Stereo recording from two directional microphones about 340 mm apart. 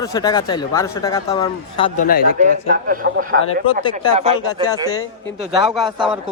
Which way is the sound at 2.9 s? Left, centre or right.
Right.